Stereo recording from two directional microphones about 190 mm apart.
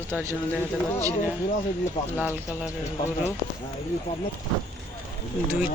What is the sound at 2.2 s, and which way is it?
Speech, 10° right (ahead or behind).